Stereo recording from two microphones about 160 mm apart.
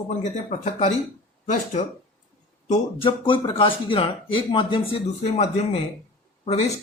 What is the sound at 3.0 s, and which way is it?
Speech, 35° left (ahead or behind).